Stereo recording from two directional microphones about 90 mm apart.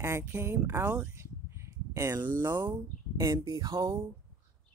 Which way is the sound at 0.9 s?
15° right (ahead or behind).